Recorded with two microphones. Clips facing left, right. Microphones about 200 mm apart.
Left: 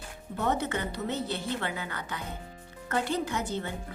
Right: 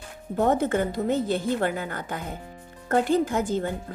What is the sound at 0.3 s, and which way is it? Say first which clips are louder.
Speech: right 7 dB; 45° right (ahead or behind).